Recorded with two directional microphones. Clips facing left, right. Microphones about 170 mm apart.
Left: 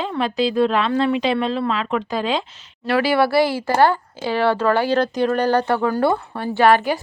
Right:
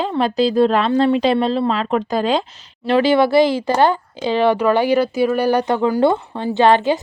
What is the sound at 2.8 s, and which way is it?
Speech, 20° right (ahead or behind).